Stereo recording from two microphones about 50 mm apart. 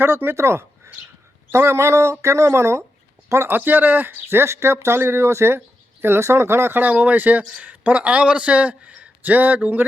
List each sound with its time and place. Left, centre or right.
0.0 s speech: right
3.5 s speech: right
5.5 s speech: right
6.7 s a man's voice: right